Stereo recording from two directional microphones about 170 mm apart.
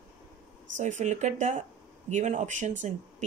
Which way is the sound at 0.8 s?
45° right (ahead or behind).